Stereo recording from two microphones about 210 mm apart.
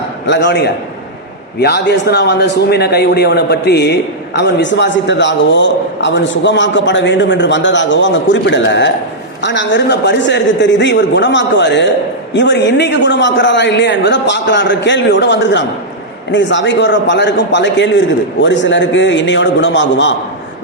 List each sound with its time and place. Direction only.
0.3 s a man's voice: 55° left (ahead or behind)